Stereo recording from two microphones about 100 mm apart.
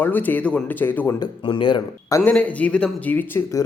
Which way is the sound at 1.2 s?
55° left (ahead or behind).